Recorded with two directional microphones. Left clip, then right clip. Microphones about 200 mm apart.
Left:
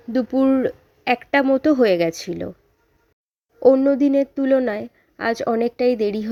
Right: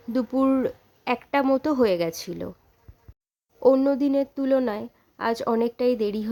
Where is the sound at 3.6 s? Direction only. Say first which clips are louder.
Left 5 dB; 15° left (ahead or behind).